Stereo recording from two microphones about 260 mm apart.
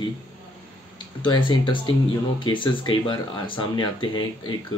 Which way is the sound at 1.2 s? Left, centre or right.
Centre.